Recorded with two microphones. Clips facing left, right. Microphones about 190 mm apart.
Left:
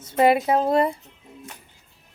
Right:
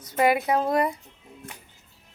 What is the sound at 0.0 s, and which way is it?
Speech, 25° left (ahead or behind).